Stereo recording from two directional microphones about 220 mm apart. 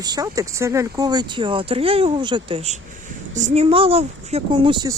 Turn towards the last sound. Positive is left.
turn(degrees=-20)  # may be behind; listen again after turning